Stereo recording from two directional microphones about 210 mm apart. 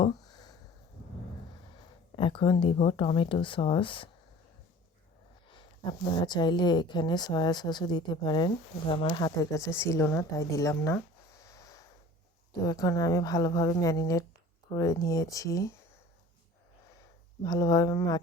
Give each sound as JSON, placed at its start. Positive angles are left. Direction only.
{"t": 0.0, "sound": "a sound", "side_deg": 20}
{"t": 2.1, "sound": "speech", "side_deg": 25}
{"t": 5.5, "sound": "speech", "side_deg": 20}
{"t": 11.4, "sound": "snort", "side_deg": 15}
{"t": 12.6, "sound": "a woman's voice", "side_deg": 15}
{"t": 17.4, "sound": "a woman's voice", "side_deg": 20}